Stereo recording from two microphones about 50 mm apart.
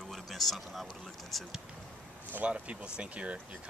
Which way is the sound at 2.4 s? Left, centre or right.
Right.